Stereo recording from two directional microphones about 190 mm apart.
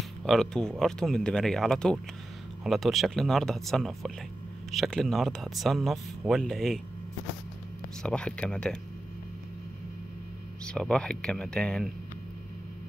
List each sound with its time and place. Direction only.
0.2 s speech: centre (ahead or behind)
8.0 s speech: 5° left (ahead or behind)
10.7 s speech: 5° left (ahead or behind)